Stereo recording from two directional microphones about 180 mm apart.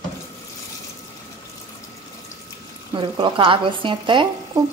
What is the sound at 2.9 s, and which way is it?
Speech, 25° right (ahead or behind).